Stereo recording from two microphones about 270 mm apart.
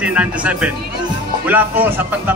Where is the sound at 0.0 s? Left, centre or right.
Centre.